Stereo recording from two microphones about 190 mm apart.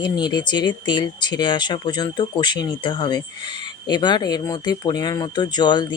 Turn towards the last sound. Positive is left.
turn(degrees=25)  # may be behind; listen again after turning